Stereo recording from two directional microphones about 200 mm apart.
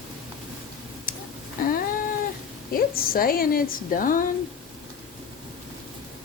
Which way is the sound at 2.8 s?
45° left (ahead or behind).